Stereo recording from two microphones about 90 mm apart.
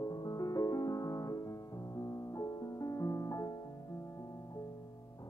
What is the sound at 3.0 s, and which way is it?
Music, 35° left (ahead or behind).